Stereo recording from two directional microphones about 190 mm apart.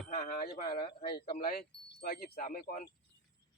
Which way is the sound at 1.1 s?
50° left (ahead or behind).